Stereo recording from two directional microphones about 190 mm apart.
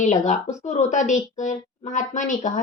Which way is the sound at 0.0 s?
40° left (ahead or behind).